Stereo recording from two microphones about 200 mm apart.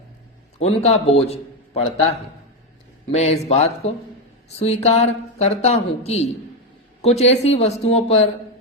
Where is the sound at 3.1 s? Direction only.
30° left (ahead or behind).